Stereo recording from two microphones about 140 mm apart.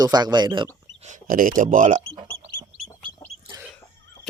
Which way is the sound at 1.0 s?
70° right (ahead or behind).